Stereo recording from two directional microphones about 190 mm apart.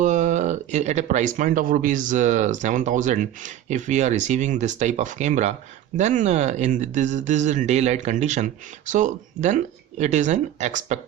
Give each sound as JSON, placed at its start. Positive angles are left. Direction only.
{"t": 0.0, "sound": "speech", "side_deg": -40}